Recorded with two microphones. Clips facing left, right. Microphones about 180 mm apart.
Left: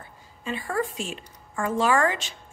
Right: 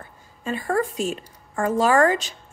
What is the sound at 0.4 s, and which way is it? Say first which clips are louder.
A woman's voice: right 4 dB; 45° right (ahead or behind).